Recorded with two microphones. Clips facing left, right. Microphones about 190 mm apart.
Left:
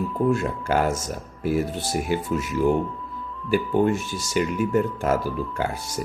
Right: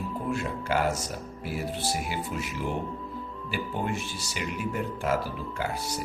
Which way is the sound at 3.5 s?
45° left (ahead or behind).